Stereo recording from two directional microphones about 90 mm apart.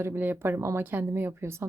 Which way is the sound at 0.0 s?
25° right (ahead or behind).